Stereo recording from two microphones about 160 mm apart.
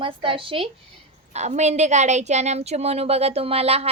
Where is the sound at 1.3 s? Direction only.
45° right (ahead or behind).